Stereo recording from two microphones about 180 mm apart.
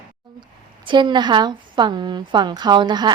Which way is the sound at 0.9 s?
25° right (ahead or behind).